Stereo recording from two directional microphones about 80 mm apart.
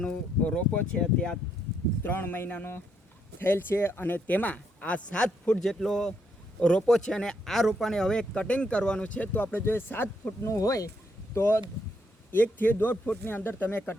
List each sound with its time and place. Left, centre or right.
0.0 s speech: centre
2.0 s speech: left
10.5 s speech: left
11.3 s speech: left
12.3 s speech: left